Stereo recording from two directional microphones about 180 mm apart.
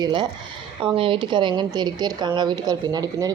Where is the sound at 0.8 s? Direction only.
30° right (ahead or behind).